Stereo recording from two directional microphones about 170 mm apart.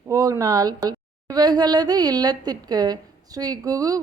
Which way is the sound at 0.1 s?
20° right (ahead or behind).